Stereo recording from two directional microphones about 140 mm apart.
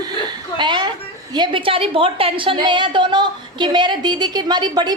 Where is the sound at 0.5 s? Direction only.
35° right (ahead or behind).